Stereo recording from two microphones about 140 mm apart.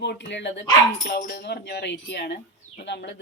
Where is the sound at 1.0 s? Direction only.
90° left.